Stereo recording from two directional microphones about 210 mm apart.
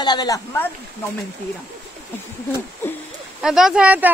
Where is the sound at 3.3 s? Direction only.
Centre (ahead or behind).